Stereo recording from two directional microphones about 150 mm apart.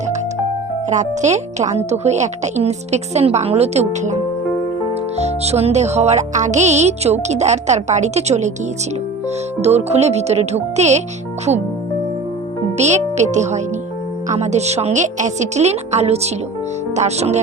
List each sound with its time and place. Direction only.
0.9 s music: 50° right (ahead or behind)
9.6 s music: 45° right (ahead or behind)
12.7 s music: 50° right (ahead or behind)